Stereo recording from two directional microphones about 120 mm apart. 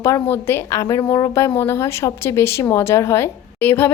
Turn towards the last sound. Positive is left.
turn(degrees=15)  # may be behind; listen again after turning